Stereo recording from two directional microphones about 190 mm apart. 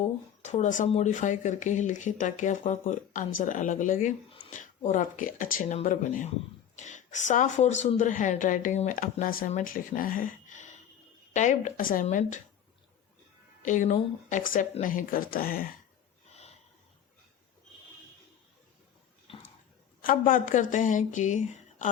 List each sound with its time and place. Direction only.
0.0 s a woman's voice: 40° left (ahead or behind)
13.6 s speech: 40° left (ahead or behind)
20.0 s a woman's voice: 45° left (ahead or behind)